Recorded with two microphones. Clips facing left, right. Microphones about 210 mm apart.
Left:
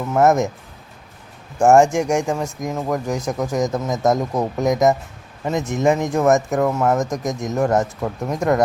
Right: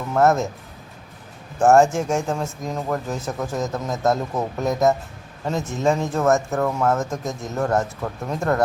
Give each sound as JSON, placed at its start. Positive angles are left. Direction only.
{"t": 0.1, "sound": "speech", "side_deg": 15}
{"t": 1.5, "sound": "speech", "side_deg": 15}